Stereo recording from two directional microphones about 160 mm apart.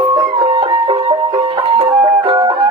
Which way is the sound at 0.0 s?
30° right (ahead or behind).